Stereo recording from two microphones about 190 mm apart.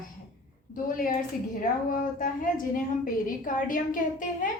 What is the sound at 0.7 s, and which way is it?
A woman's voice, 45° left (ahead or behind).